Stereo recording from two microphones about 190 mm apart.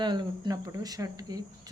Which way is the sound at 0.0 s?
25° right (ahead or behind).